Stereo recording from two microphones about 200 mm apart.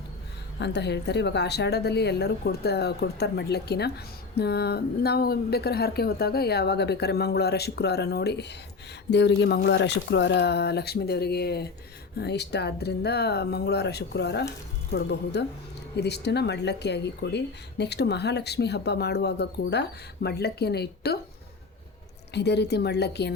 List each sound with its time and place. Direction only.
0.6 s a woman's voice: 55° left (ahead or behind)
22.3 s speech: 55° left (ahead or behind)